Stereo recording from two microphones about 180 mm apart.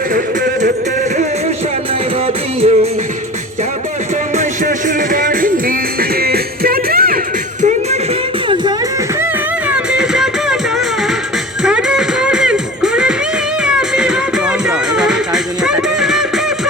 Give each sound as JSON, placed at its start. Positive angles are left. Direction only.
{"t": 2.2, "sound": "music", "side_deg": -35}
{"t": 4.4, "sound": "music", "side_deg": -45}
{"t": 9.6, "sound": "music", "side_deg": -5}